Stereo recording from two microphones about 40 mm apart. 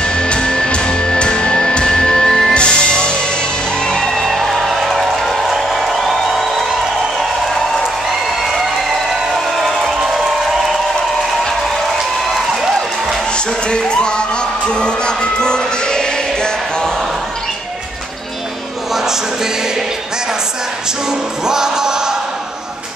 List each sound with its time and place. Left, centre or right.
0.0 s music: left
4.1 s music: centre
5.5 s crowd: centre
9.8 s a sound: centre
13.7 s music: left
21.5 s music: centre